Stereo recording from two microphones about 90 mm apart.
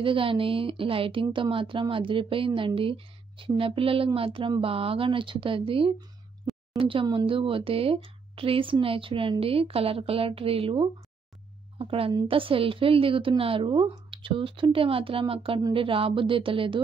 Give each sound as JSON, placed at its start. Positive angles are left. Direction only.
{"t": 0.0, "sound": "a woman's voice", "side_deg": -80}
{"t": 9.4, "sound": "speech", "side_deg": -90}